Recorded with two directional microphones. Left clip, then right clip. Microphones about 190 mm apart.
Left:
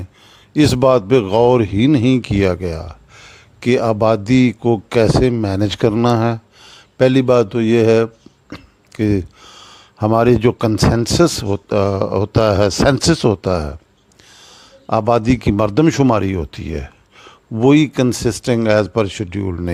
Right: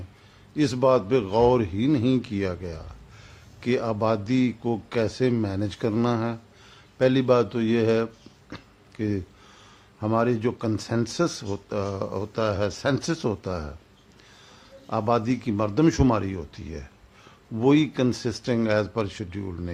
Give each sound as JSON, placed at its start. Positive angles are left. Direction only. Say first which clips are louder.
{"t": 0.5, "sound": "speech", "louder": "left 8 dB", "side_deg": 45}
{"t": 9.0, "sound": "a sound", "louder": "left 11 dB", "side_deg": 45}
{"t": 10.8, "sound": "a man's voice", "louder": "left 12 dB", "side_deg": 45}